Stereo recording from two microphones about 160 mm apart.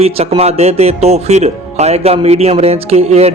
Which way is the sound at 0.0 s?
40° right (ahead or behind).